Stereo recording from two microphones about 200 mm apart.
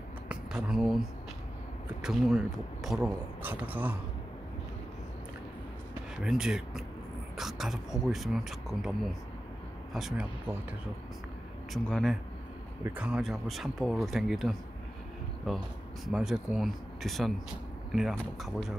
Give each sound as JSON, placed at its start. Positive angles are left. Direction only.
{"t": 0.3, "sound": "speech", "side_deg": 0}
{"t": 6.2, "sound": "speech", "side_deg": -5}
{"t": 11.7, "sound": "speech", "side_deg": 5}